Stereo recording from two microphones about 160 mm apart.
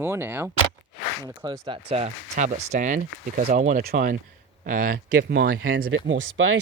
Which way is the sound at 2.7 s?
55° right (ahead or behind).